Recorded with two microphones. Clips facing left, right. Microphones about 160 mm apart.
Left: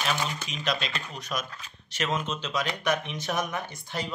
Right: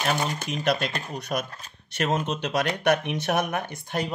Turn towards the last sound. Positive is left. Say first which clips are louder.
# right 5 dB
turn(degrees=-60)  # may be behind; listen again after turning